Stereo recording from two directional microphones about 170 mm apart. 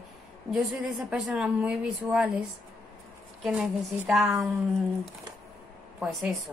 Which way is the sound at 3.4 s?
5° right (ahead or behind).